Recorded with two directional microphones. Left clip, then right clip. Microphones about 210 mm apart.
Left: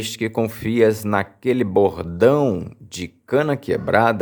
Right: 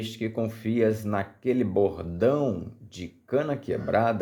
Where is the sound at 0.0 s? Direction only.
30° left (ahead or behind).